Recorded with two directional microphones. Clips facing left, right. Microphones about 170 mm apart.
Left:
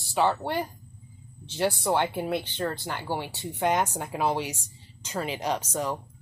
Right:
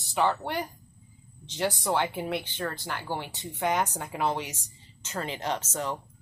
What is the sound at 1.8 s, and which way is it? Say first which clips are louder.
Speech: left 2 dB; 15° left (ahead or behind).